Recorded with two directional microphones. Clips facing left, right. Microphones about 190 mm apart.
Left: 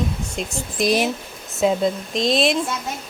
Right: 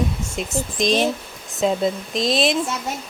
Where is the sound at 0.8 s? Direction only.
10° left (ahead or behind).